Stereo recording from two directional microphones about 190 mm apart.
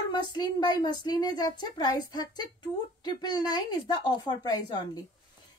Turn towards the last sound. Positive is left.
turn(degrees=20)  # may be behind; listen again after turning